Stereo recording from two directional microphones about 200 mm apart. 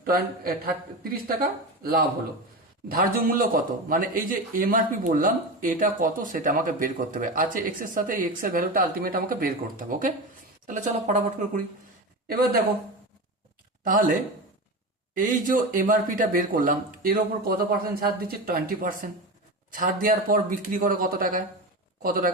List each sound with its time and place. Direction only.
0.0 s a man's voice: 45° right (ahead or behind)
13.8 s a man's voice: 40° right (ahead or behind)